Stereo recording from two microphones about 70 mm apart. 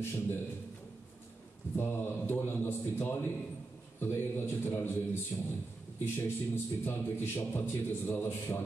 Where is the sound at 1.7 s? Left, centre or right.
Left.